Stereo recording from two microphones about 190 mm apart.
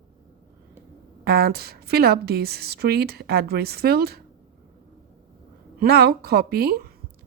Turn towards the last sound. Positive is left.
turn(degrees=-55)  # may be behind; listen again after turning